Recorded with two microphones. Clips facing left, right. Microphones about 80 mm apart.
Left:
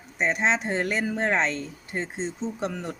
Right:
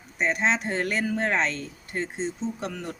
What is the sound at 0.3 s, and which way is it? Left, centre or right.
Speech, left.